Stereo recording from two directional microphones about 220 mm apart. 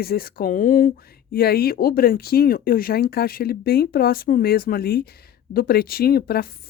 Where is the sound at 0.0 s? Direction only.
45° left (ahead or behind).